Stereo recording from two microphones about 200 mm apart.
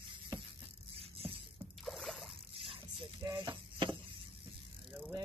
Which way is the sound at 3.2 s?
20° right (ahead or behind).